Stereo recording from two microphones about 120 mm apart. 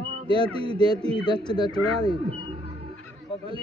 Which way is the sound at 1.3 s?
40° left (ahead or behind).